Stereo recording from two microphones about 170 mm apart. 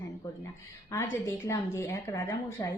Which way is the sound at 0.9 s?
15° left (ahead or behind).